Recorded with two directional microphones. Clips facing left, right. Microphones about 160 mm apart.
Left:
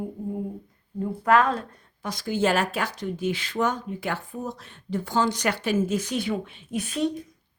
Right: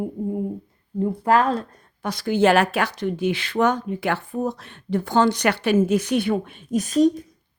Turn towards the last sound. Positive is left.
turn(degrees=-40)  # may be behind; listen again after turning